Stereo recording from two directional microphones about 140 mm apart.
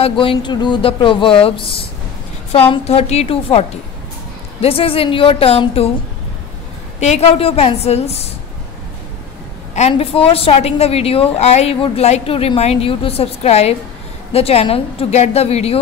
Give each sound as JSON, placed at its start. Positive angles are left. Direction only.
{"t": 0.0, "sound": "a woman's voice", "side_deg": 40}
{"t": 7.0, "sound": "a woman's voice", "side_deg": 50}
{"t": 9.8, "sound": "a woman's voice", "side_deg": 45}